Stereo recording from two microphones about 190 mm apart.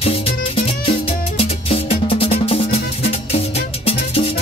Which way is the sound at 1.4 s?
30° left (ahead or behind).